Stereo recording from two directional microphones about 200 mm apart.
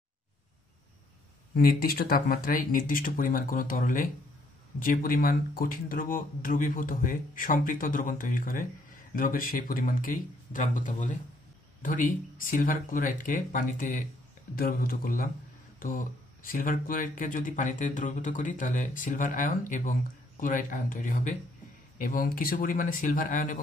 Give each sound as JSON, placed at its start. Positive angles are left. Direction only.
{"t": 1.5, "sound": "speech", "side_deg": 45}